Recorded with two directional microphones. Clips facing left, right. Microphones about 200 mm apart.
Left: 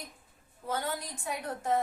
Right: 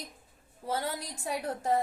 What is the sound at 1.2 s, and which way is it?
Speech, 35° right (ahead or behind).